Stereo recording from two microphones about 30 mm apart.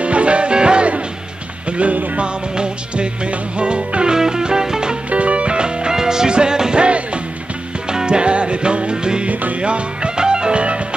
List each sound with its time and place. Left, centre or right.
0.0 s music: right
1.7 s music: right
2.1 s music: right
4.1 s music: right
5.1 s music: right
5.5 s music: right
5.9 s music: right
7.9 s music: right
9.3 s music: right
9.6 s music: right